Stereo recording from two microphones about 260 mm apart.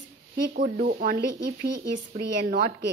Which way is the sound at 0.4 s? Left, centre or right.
Right.